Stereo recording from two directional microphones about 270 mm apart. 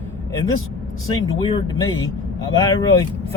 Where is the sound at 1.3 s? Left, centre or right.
Centre.